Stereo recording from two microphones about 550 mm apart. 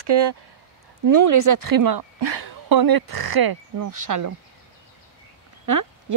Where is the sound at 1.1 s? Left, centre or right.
Right.